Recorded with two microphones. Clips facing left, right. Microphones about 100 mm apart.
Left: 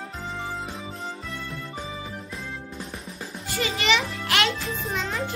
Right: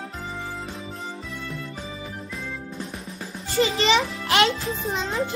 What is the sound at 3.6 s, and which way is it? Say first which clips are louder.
A child's voice: right 4 dB; 30° right (ahead or behind).